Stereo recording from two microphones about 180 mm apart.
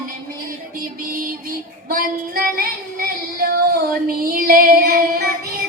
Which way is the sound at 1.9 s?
55° right (ahead or behind).